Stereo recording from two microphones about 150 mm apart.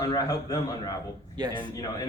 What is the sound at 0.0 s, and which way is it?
Speech, 25° left (ahead or behind).